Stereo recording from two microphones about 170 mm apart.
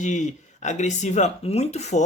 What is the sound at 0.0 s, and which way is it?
Speech, 45° left (ahead or behind).